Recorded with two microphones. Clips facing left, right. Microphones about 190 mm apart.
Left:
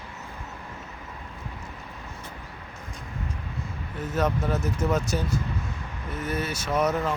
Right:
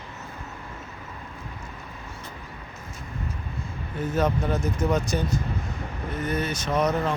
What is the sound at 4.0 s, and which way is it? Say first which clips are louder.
Speech: right 2 dB; centre (ahead or behind).